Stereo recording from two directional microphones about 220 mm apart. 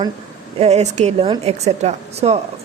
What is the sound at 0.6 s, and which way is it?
Speech, 30° right (ahead or behind).